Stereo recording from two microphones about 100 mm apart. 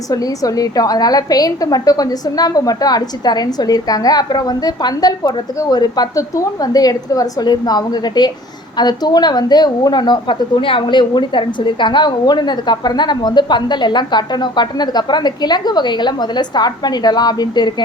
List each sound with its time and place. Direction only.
0.1 s a woman's voice: 35° left (ahead or behind)